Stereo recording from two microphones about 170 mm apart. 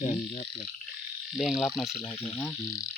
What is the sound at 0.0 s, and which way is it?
Frog, 45° left (ahead or behind).